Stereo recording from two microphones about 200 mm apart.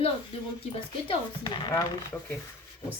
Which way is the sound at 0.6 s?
25° left (ahead or behind).